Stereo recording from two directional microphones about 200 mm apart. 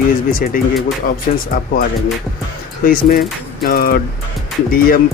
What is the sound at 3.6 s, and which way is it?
Speech, 45° left (ahead or behind).